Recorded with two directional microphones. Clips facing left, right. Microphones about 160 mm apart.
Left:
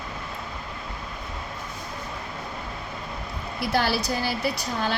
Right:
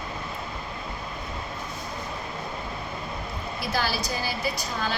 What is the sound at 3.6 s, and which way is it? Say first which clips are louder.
A woman's voice: left 4 dB; 65° left (ahead or behind).